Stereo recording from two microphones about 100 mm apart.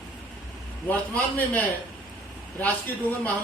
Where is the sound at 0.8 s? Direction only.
15° left (ahead or behind).